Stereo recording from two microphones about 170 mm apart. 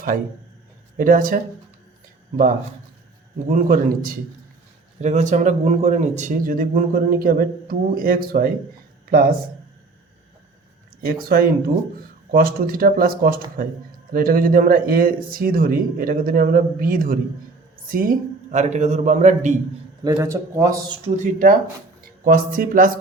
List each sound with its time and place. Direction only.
0.9 s speech: 55° right (ahead or behind)
3.5 s speech: 55° right (ahead or behind)
4.9 s speech: 45° right (ahead or behind); by 9.3 s 60° right (ahead or behind)
11.3 s speech: 60° right (ahead or behind)
20.1 s a man's voice: 20° right (ahead or behind)
21.3 s speech: 50° right (ahead or behind)